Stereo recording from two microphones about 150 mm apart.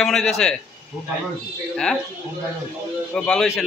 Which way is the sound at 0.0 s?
Centre (ahead or behind).